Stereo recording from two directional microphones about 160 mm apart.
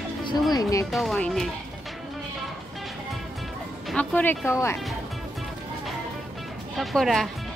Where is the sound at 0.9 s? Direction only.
Centre (ahead or behind).